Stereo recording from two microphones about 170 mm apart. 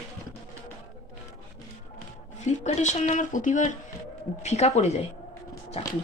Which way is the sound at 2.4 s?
45° left (ahead or behind).